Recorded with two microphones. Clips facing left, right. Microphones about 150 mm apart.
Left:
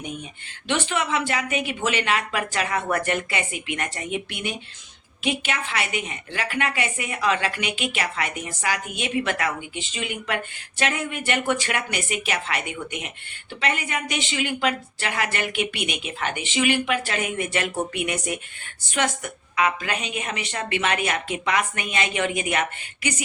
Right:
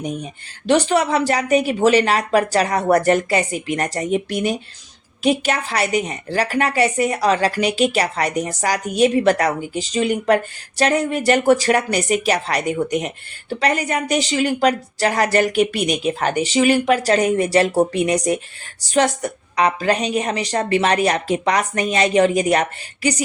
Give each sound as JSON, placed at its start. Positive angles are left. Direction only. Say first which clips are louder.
{"t": 0.0, "sound": "a woman's voice", "louder": "right 7 dB", "side_deg": -40}